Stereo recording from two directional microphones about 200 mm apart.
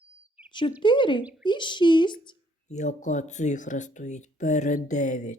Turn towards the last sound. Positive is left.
turn(degrees=40)  # may be behind; listen again after turning